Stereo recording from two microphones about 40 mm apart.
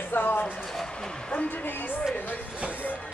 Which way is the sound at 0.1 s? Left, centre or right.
Left.